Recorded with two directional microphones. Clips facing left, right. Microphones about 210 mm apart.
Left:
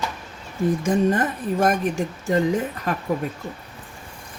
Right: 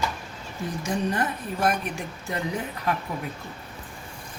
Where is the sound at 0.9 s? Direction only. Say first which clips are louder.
Left 4 dB; 50° left (ahead or behind).